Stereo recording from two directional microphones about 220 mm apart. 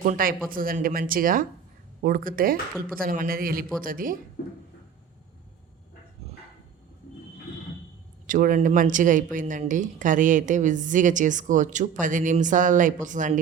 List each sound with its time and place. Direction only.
0.0 s speech: 40° right (ahead or behind)
8.3 s speech: 35° right (ahead or behind)